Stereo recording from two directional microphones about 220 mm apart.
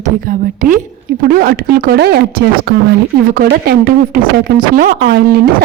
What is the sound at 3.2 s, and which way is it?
A woman's voice, 40° right (ahead or behind).